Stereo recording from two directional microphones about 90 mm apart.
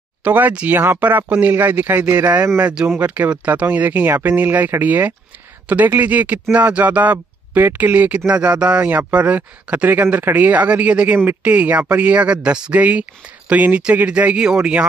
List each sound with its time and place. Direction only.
0.2 s speech: 20° right (ahead or behind)